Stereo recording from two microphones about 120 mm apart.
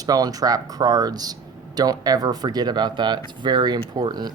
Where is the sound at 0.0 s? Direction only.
30° right (ahead or behind).